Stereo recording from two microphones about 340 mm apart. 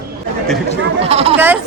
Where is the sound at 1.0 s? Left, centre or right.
Centre.